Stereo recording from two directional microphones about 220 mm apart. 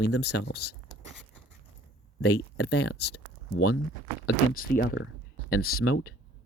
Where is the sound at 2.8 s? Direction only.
90° left.